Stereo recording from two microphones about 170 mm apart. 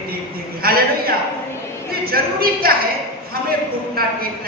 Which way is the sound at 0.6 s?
60° right (ahead or behind).